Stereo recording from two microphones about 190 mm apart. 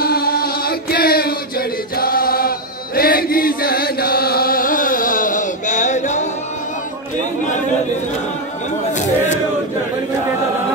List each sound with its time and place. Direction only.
0.0 s chant: 55° left (ahead or behind)